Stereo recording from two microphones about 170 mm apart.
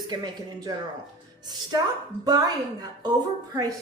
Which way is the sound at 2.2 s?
25° right (ahead or behind).